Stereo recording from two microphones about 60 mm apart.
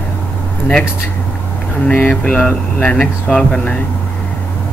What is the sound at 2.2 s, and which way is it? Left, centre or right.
Speech, centre.